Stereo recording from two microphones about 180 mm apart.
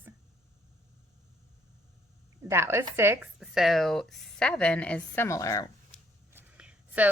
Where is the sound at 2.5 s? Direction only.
15° right (ahead or behind).